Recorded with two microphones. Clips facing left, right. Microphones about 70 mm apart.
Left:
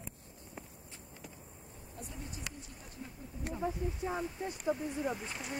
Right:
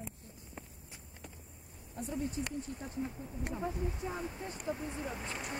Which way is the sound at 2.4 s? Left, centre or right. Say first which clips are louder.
Right 8 dB; right.